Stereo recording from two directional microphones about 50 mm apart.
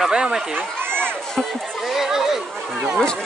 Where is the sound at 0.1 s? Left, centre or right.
Centre.